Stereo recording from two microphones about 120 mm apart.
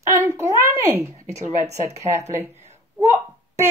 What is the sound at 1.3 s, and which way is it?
Speech, 70° right (ahead or behind).